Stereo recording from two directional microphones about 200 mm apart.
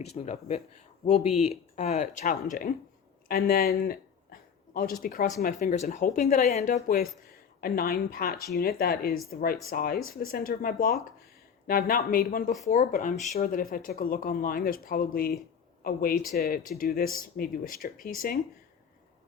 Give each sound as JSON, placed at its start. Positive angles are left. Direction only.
{"t": 0.1, "sound": "speech", "side_deg": 35}
{"t": 6.8, "sound": "speech", "side_deg": 50}